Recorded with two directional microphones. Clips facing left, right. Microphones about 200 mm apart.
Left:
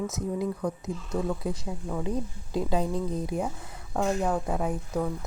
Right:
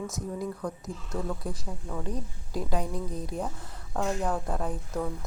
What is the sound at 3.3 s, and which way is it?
A woman's voice, 5° left (ahead or behind).